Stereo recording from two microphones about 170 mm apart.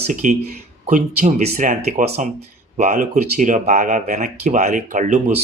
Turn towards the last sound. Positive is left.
turn(degrees=-45)  # may be behind; listen again after turning